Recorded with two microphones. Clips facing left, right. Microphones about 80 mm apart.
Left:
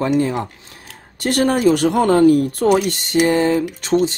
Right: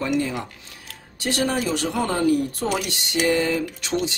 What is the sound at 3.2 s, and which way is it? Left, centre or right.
Speech, left.